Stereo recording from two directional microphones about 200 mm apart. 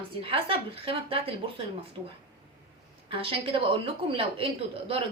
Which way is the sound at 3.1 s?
25° right (ahead or behind).